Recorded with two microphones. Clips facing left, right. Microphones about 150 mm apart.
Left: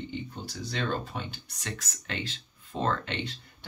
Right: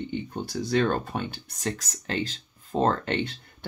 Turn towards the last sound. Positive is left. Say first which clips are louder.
# right 7 dB
turn(degrees=-55)  # may be behind; listen again after turning